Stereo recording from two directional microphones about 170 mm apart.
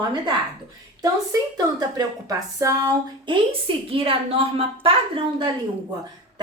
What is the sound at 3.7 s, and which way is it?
A woman's voice, 30° right (ahead or behind).